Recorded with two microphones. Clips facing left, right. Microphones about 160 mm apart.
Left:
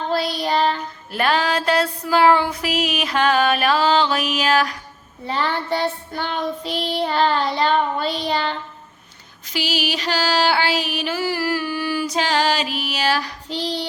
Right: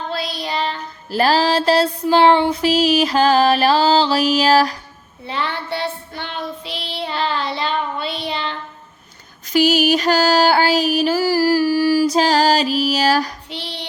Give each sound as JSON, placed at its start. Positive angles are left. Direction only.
{"t": 0.1, "sound": "child singing", "side_deg": 45}
{"t": 1.1, "sound": "music", "side_deg": -30}
{"t": 5.2, "sound": "child singing", "side_deg": 40}
{"t": 9.5, "sound": "music", "side_deg": -45}
{"t": 13.5, "sound": "child singing", "side_deg": 40}